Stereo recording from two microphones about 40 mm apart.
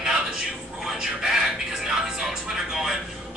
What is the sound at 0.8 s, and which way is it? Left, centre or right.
Music, centre.